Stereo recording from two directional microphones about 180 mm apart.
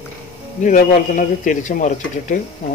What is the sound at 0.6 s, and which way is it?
A man's voice, 45° left (ahead or behind).